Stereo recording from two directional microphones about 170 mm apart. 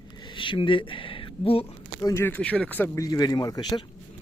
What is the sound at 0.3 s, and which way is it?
Speech, 30° left (ahead or behind).